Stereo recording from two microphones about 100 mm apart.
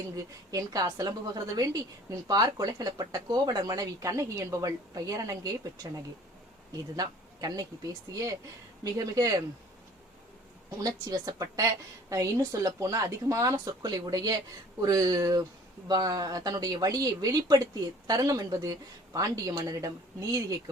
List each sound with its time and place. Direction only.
0.2 s a woman's voice: 35° right (ahead or behind)
6.9 s a woman's voice: 40° right (ahead or behind)
10.8 s a woman's voice: 40° right (ahead or behind)